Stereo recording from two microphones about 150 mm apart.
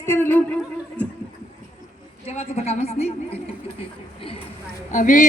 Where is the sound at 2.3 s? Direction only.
45° left (ahead or behind).